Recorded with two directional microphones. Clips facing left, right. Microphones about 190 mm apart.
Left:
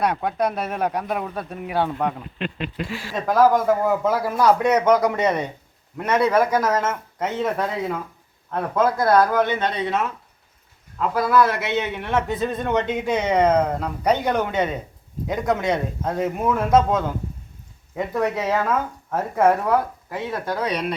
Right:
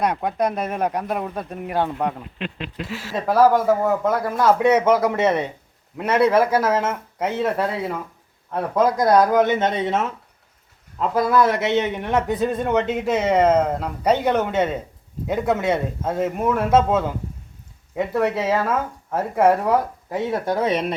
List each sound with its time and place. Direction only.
0.2 s speech: 5° right (ahead or behind)
0.4 s speech: 5° left (ahead or behind); by 19.8 s 10° right (ahead or behind)
20.1 s speech: 25° right (ahead or behind)